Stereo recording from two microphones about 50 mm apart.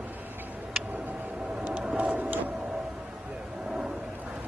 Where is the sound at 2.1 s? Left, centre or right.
Right.